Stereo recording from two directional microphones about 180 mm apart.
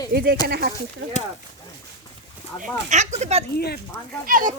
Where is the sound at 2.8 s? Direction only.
40° right (ahead or behind).